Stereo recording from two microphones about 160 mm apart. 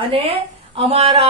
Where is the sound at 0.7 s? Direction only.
35° right (ahead or behind).